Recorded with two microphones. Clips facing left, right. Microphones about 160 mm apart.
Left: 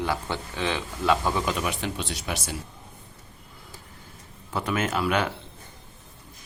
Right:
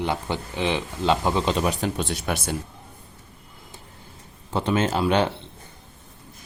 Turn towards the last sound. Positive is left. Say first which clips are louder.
# right 4 dB
turn(degrees=-30)  # may be behind; listen again after turning